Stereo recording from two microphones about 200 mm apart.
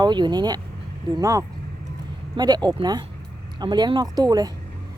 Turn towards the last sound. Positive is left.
turn(degrees=-20)  # may be behind; listen again after turning